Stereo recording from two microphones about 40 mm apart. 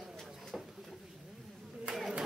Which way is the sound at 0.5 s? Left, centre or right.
Centre.